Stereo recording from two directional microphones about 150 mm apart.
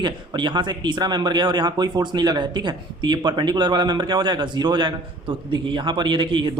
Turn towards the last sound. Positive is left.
turn(degrees=-30)  # may be behind; listen again after turning